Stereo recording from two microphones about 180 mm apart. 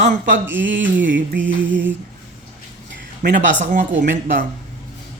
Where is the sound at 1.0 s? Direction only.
90° right.